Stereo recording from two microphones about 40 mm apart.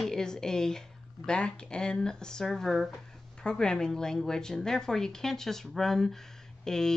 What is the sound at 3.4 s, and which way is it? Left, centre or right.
Speech, centre.